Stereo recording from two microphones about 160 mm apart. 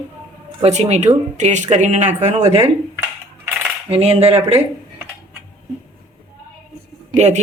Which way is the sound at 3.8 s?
40° right (ahead or behind).